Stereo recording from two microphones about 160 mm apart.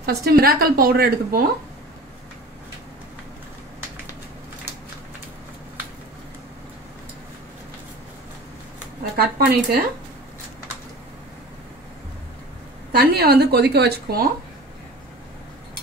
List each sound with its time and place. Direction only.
0.0 s a woman's voice: 75° right (ahead or behind)
9.1 s speech: 80° right
12.9 s a woman's voice: 70° right (ahead or behind)